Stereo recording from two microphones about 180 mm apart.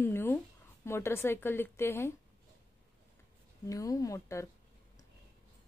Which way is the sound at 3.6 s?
20° left (ahead or behind).